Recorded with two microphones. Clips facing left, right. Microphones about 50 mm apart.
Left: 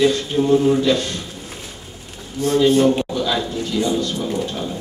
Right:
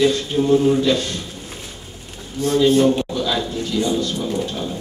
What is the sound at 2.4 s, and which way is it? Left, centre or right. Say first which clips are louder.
Speech: left 1 dB; left.